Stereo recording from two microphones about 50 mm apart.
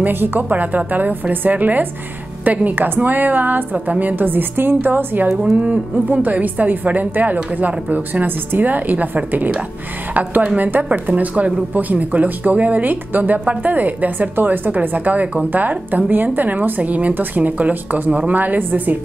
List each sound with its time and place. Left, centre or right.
0.0 s speech: right
5.3 s speech: centre
5.6 s music: right
6.4 s speech: right